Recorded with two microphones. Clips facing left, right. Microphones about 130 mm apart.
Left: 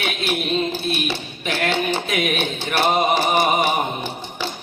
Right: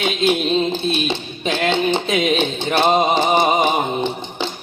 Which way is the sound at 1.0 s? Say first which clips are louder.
Right 4 dB; 20° right (ahead or behind).